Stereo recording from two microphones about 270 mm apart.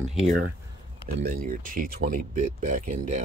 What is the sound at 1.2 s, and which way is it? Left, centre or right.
Speech, right.